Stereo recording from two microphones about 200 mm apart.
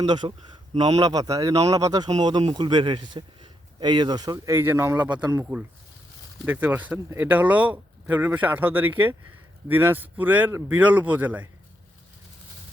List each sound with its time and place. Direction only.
0.1 s a man's voice: 25° right (ahead or behind)
0.9 s speech: 20° right (ahead or behind)